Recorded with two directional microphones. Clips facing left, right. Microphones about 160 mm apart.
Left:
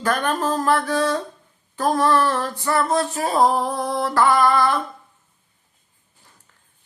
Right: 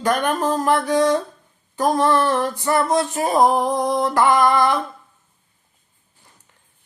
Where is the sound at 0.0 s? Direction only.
15° right (ahead or behind).